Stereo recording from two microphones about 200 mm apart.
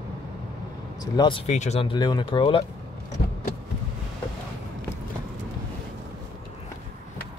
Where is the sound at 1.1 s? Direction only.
20° left (ahead or behind).